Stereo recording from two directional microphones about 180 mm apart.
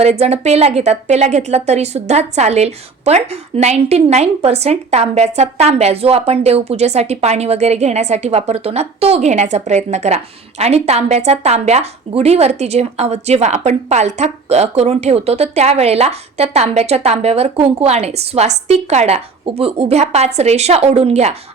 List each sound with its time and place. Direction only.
0.0 s a woman's voice: 35° right (ahead or behind)